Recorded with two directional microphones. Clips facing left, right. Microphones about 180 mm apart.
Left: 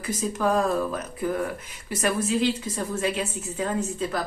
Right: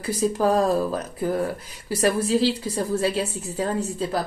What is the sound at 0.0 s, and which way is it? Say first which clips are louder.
Speech: right 4 dB; 35° right (ahead or behind).